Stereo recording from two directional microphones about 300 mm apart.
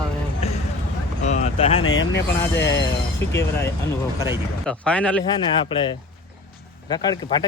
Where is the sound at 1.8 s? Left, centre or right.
Left.